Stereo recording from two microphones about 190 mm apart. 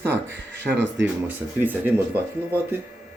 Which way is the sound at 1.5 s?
10° right (ahead or behind).